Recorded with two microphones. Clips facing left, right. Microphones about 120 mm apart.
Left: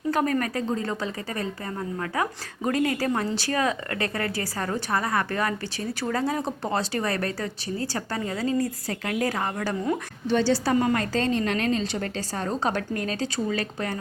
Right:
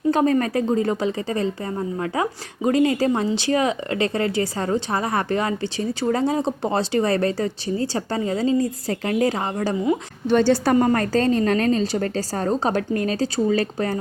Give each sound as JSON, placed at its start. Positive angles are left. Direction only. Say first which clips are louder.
{"t": 0.1, "sound": "speech", "louder": "right 6 dB", "side_deg": -25}
{"t": 2.6, "sound": "speech", "louder": "right 6 dB", "side_deg": -25}
{"t": 10.2, "sound": "a woman's voice", "louder": "right 5 dB", "side_deg": -55}
{"t": 10.8, "sound": "a woman's voice", "louder": "right 5 dB", "side_deg": -40}